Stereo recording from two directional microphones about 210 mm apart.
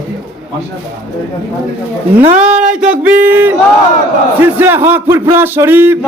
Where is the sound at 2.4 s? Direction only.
5° right (ahead or behind).